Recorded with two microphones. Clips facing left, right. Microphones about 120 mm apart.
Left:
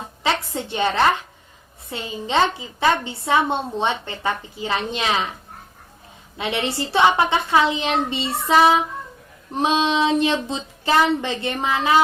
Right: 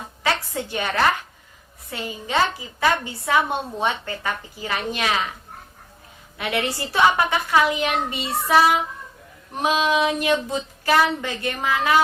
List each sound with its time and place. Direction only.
0.0 s a woman's voice: 25° left (ahead or behind)
6.3 s a woman's voice: 25° left (ahead or behind)